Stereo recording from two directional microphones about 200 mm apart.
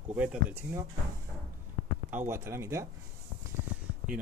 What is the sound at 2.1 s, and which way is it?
Speech, 10° right (ahead or behind).